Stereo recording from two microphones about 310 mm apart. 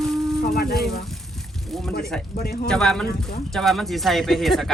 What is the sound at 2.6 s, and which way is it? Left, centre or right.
Speech, centre.